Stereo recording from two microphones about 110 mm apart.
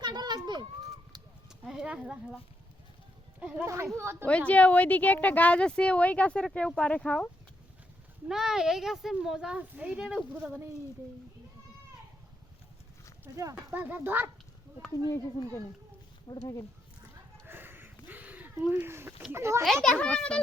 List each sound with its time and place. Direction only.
0.0 s children playing: 40° right (ahead or behind)
1.1 s a sound: 40° right (ahead or behind)
1.5 s speech: 5° right (ahead or behind)
3.4 s speech: 15° right (ahead or behind)
4.3 s speech: 10° left (ahead or behind)
8.3 s a child's voice: 5° right (ahead or behind)
10.4 s speech: 25° right (ahead or behind)
13.2 s speech: 30° right (ahead or behind)
13.7 s speech: 15° right (ahead or behind)
14.9 s speech: 35° left (ahead or behind)
17.4 s a sound: 20° right (ahead or behind)
18.7 s speech: 20° right (ahead or behind)
19.6 s a child's voice: 5° left (ahead or behind)